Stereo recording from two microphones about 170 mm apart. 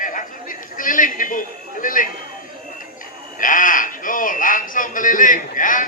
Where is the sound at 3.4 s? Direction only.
50° left (ahead or behind).